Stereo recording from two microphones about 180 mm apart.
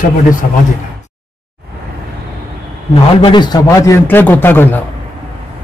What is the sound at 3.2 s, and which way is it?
A man's voice, 25° left (ahead or behind).